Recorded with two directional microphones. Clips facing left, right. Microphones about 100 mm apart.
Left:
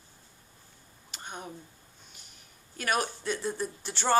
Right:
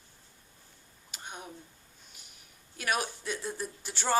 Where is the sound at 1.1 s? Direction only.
5° right (ahead or behind).